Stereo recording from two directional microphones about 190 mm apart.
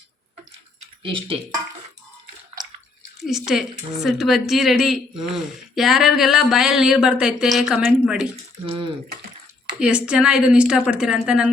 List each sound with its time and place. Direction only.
1.0 s speech: 25° right (ahead or behind)
3.2 s a woman's voice: centre (ahead or behind)
8.6 s speech: 30° right (ahead or behind)
9.8 s a woman's voice: 5° right (ahead or behind)